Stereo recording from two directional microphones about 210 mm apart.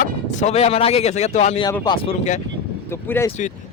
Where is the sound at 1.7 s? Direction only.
20° left (ahead or behind).